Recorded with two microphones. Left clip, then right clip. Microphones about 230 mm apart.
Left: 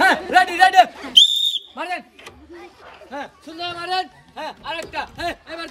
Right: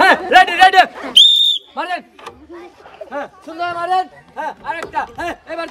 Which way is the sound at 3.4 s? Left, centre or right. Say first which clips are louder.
Right 9 dB; centre.